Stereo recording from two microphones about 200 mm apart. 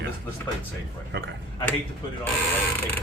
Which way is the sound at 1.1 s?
60° right (ahead or behind).